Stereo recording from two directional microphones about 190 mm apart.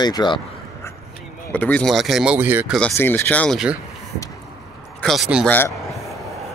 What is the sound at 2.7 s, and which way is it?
Speech, 10° left (ahead or behind).